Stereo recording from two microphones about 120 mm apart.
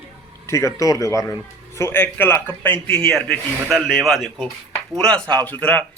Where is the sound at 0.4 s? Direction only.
25° left (ahead or behind).